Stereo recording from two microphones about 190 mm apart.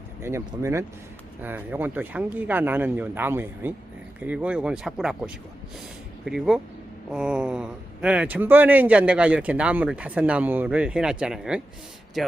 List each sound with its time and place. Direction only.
0.2 s speech: 15° right (ahead or behind)